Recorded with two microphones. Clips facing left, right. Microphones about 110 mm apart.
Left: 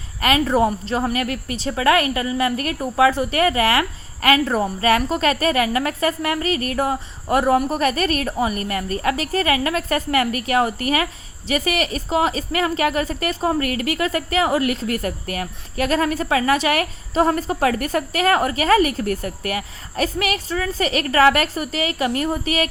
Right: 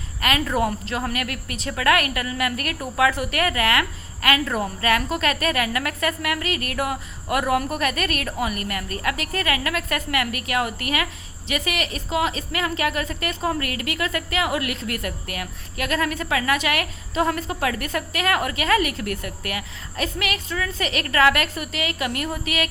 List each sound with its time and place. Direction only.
0.2 s a woman's voice: 30° left (ahead or behind)